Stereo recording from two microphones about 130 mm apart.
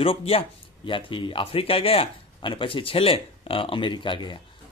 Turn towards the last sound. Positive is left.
turn(degrees=35)  # may be behind; listen again after turning